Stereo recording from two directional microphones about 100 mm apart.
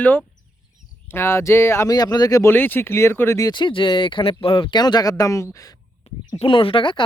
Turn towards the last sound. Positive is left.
turn(degrees=55)  # may be behind; listen again after turning